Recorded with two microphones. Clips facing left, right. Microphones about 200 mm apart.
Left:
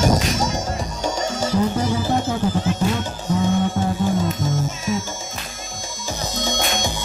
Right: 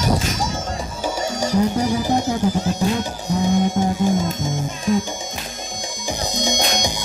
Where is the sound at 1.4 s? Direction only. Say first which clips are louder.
Right 2 dB; 15° right (ahead or behind).